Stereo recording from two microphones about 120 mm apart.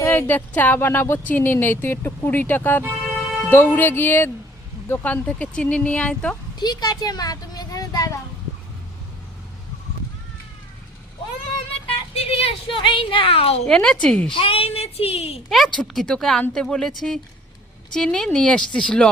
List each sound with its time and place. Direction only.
0.0 s speech: 20° left (ahead or behind)
6.6 s speech: 35° left (ahead or behind)
12.1 s speech: 55° left (ahead or behind)
13.7 s speech: 5° left (ahead or behind)
14.3 s speech: 50° left (ahead or behind)
15.4 s speech: centre (ahead or behind)